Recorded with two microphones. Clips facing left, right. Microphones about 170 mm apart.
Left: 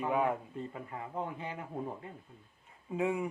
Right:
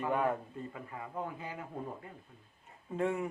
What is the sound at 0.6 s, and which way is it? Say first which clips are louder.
Speech: left 2 dB; 25° left (ahead or behind).